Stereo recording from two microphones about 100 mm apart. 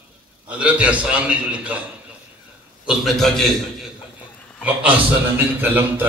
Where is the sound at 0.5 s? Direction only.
15° right (ahead or behind).